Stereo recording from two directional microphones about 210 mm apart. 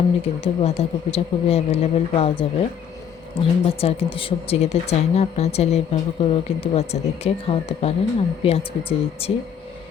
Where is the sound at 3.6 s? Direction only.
25° left (ahead or behind).